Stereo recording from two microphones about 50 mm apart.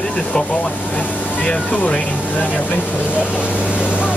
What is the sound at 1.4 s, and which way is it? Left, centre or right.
Speech, left.